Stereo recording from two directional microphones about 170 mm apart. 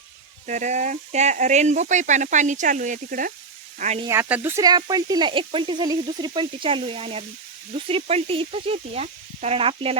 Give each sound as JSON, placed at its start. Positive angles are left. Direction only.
{"t": 0.4, "sound": "speech", "side_deg": -45}
{"t": 3.8, "sound": "speech", "side_deg": -40}
{"t": 4.0, "sound": "speech", "side_deg": -15}